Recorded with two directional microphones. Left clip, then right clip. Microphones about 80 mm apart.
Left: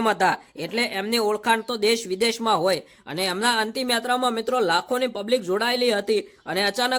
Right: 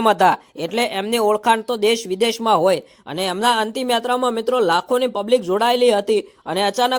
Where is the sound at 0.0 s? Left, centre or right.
Right.